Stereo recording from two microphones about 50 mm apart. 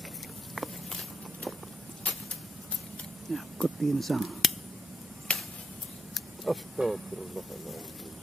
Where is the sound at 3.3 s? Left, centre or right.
Centre.